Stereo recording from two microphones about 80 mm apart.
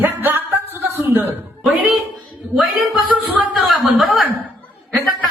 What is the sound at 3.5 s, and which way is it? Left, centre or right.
Speech, centre.